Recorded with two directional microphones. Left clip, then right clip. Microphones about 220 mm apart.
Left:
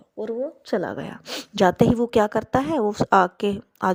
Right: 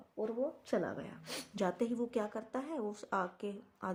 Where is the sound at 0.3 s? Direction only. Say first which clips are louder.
Left 12 dB; 45° left (ahead or behind).